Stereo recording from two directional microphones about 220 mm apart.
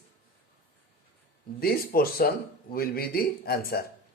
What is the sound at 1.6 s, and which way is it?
Speech, 45° left (ahead or behind).